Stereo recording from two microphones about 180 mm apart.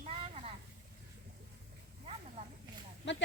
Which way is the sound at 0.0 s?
35° right (ahead or behind).